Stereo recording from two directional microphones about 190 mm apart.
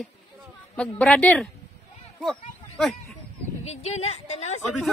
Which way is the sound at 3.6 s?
35° left (ahead or behind).